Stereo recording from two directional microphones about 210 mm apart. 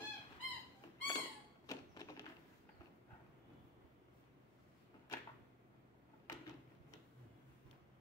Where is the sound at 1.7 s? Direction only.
15° left (ahead or behind).